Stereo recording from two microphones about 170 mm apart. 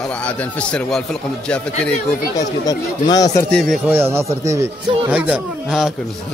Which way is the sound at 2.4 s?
20° left (ahead or behind).